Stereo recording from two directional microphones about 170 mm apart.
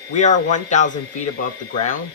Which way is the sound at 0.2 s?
45° left (ahead or behind).